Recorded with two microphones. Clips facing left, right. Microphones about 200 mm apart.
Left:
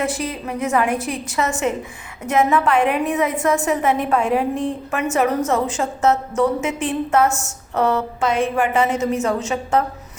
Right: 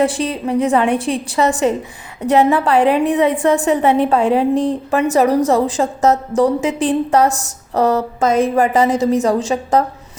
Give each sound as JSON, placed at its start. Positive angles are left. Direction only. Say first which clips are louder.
{"t": 0.0, "sound": "a woman's voice", "louder": "right 7 dB", "side_deg": -30}